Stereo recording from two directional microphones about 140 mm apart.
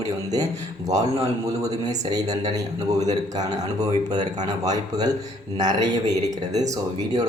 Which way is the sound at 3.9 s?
30° right (ahead or behind).